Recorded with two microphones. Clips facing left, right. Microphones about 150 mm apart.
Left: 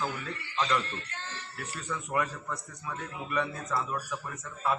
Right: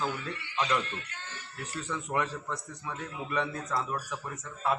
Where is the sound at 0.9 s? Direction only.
35° left (ahead or behind).